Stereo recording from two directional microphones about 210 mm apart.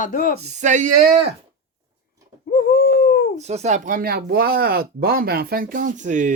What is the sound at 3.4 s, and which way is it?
Speech, 30° right (ahead or behind).